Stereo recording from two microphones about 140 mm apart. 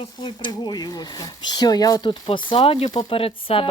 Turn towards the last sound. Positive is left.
turn(degrees=40)  # may be behind; listen again after turning